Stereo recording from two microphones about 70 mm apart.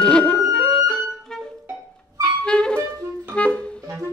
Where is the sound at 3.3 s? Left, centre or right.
Centre.